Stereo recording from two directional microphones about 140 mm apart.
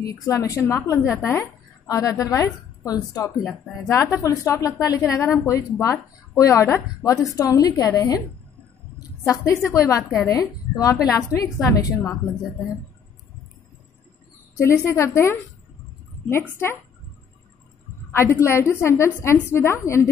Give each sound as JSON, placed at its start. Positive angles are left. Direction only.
{"t": 0.0, "sound": "a woman's voice", "side_deg": 25}
{"t": 3.3, "sound": "speech", "side_deg": 0}
{"t": 3.8, "sound": "a woman's voice", "side_deg": 20}
{"t": 8.9, "sound": "a sound", "side_deg": 25}
{"t": 10.2, "sound": "a woman's voice", "side_deg": 25}
{"t": 14.6, "sound": "a woman's voice", "side_deg": 20}
{"t": 18.1, "sound": "a woman's voice", "side_deg": 20}